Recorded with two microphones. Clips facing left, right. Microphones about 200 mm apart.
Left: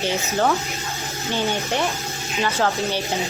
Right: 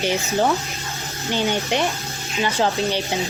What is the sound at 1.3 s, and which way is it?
Speech, 20° right (ahead or behind).